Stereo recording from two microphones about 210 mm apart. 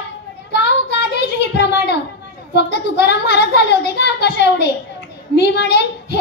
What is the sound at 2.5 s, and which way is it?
A child's voice, 55° left (ahead or behind).